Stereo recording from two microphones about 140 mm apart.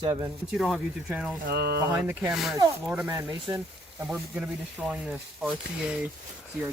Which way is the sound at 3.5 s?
30° right (ahead or behind).